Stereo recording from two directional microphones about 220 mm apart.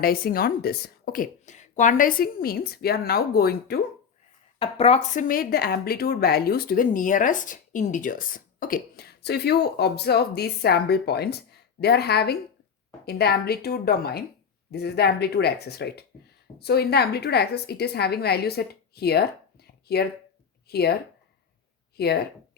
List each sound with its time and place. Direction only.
0.0 s speech: 40° left (ahead or behind)
4.6 s a woman's voice: 25° left (ahead or behind)
5.3 s speech: 40° left (ahead or behind)